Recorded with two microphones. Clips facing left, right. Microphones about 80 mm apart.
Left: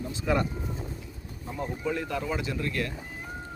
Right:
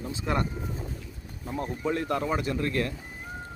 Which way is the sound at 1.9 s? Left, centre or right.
Right.